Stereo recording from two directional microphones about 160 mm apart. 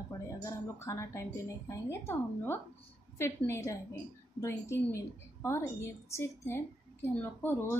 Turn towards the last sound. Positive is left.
turn(degrees=15)  # may be behind; listen again after turning